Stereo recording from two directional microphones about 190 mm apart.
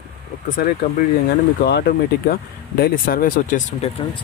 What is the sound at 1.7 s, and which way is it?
Speech, 60° left (ahead or behind).